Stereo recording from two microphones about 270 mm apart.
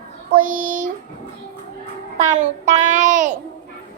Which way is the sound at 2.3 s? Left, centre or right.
Right.